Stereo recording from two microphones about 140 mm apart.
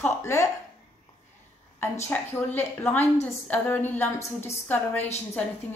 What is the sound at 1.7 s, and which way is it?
A woman's voice, 15° left (ahead or behind).